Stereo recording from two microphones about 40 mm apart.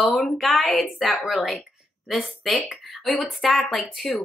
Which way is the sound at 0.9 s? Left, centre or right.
Centre.